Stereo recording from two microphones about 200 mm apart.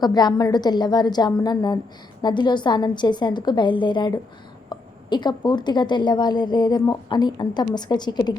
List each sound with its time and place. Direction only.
0.0 s a woman's voice: 20° left (ahead or behind)